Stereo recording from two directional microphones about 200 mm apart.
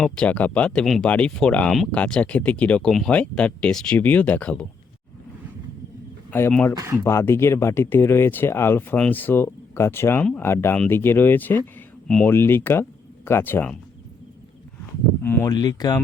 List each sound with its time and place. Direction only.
0.0 s speech: 5° left (ahead or behind)
6.3 s speech: 10° left (ahead or behind)
6.7 s speech: 15° right (ahead or behind)
7.0 s speech: 15° left (ahead or behind)
15.2 s speech: 10° left (ahead or behind)
15.5 s speech: 20° left (ahead or behind)